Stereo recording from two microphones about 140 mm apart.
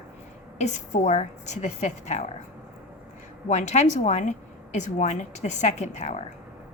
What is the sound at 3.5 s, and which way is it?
A woman's voice, 55° left (ahead or behind).